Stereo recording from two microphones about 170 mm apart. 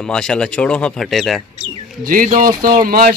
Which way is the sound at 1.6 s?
50° right (ahead or behind).